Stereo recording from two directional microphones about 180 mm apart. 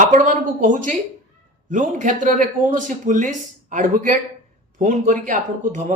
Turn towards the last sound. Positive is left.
turn(degrees=-45)  # may be behind; listen again after turning